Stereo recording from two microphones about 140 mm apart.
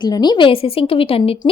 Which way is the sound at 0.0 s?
30° left (ahead or behind).